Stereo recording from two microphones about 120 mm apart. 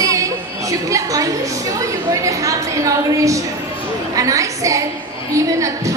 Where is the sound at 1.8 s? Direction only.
25° right (ahead or behind).